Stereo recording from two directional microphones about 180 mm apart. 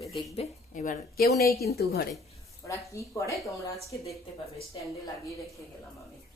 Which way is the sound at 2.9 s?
15° left (ahead or behind).